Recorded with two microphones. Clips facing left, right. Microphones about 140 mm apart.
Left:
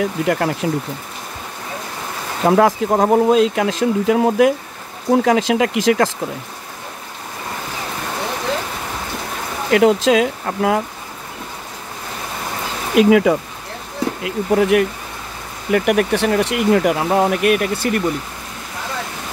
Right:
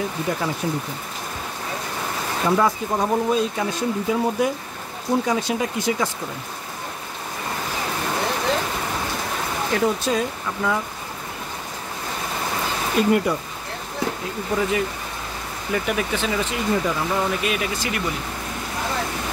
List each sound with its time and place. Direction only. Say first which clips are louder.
0.0 s speech: left 6 dB; 75° left (ahead or behind)
2.4 s speech: left 7 dB; 65° left (ahead or behind); by 6.1 s 90° left
9.7 s speech: left 9 dB; 85° left; by 10.8 s 65° left (ahead or behind)
12.9 s speech: left 8 dB; 90° left
14.2 s speech: left 11 dB; 65° left (ahead or behind)